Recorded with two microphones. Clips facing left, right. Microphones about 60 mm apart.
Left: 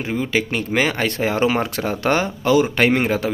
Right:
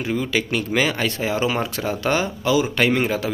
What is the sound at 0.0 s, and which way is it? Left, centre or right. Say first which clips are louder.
Speech: left 1 dB; left.